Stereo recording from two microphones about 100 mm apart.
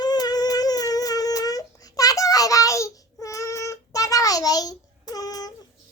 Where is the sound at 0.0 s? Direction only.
40° left (ahead or behind).